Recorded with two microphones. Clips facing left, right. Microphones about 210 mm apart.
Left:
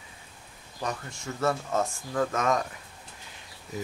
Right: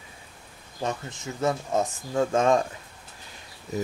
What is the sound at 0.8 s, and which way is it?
Speech, 20° right (ahead or behind).